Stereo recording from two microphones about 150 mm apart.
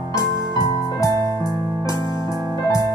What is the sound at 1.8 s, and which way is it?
Music, 25° left (ahead or behind).